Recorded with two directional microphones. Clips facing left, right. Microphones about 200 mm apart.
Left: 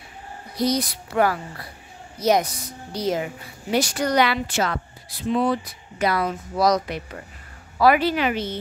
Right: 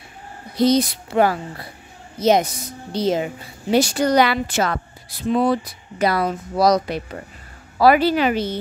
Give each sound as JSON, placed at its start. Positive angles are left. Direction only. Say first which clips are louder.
{"t": 0.6, "sound": "a woman's voice", "louder": "right 6 dB", "side_deg": -25}